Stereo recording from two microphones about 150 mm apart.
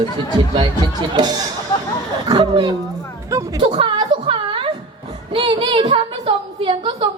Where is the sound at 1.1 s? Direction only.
30° right (ahead or behind).